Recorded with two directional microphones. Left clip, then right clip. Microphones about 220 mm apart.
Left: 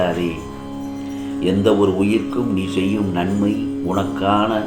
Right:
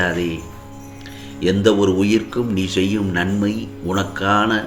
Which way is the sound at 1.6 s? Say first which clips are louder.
Even; 40° right (ahead or behind).